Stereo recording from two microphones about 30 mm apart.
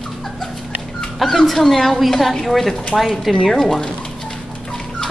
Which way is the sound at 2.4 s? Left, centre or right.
Centre.